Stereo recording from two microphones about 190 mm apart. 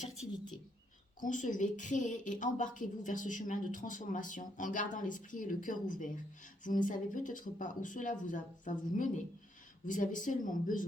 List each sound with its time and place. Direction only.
1.2 s speech: 45° left (ahead or behind)